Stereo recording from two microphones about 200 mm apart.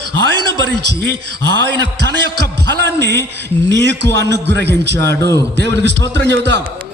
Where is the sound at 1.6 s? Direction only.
60° right (ahead or behind).